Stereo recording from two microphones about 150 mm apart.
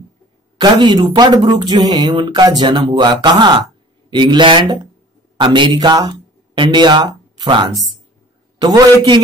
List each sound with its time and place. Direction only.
0.6 s speech: 30° right (ahead or behind)